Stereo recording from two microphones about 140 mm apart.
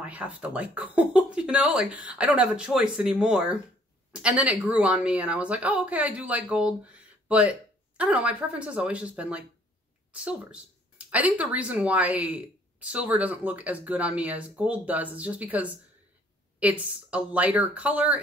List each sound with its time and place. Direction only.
0.0 s speech: 10° right (ahead or behind)